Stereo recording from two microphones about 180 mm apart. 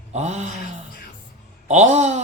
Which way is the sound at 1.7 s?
40° right (ahead or behind).